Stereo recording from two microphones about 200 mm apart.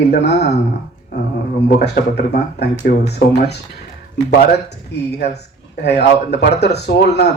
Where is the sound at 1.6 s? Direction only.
55° left (ahead or behind).